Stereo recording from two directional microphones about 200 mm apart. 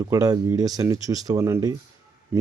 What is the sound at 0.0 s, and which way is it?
Speech, 15° right (ahead or behind).